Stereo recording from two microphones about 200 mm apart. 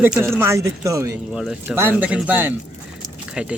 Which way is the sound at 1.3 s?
5° right (ahead or behind).